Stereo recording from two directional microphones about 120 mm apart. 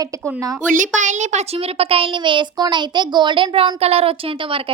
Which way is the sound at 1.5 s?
55° right (ahead or behind).